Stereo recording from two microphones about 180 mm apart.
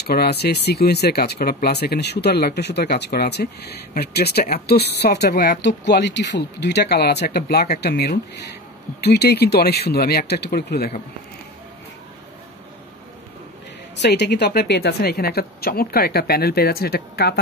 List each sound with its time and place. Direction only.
0.1 s speech: 60° left (ahead or behind)
13.9 s speech: 70° left (ahead or behind)